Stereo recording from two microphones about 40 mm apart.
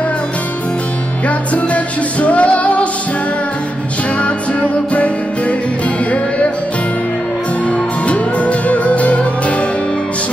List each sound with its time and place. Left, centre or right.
1.2 s music: left
4.9 s music: left
7.6 s music: left